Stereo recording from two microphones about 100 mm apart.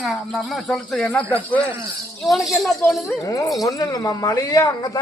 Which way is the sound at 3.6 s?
35° left (ahead or behind).